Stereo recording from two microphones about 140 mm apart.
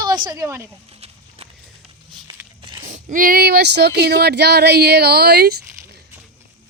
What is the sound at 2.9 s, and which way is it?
Speech, 65° right (ahead or behind).